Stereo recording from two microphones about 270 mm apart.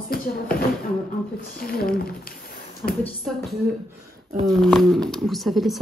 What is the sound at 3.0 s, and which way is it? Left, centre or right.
Speech, centre.